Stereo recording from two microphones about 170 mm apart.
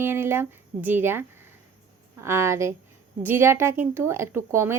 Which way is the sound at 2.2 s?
15° right (ahead or behind).